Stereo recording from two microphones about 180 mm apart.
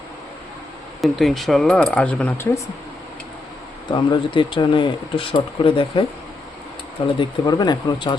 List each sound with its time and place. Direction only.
1.0 s speech: centre (ahead or behind)
3.9 s speech: 25° left (ahead or behind)
7.2 s speech: 20° left (ahead or behind)